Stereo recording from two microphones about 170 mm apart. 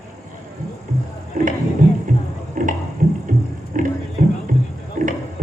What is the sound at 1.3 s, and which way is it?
Music, 50° right (ahead or behind).